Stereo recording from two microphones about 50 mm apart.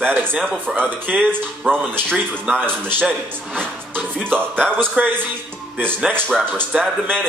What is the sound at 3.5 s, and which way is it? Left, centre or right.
Music, right.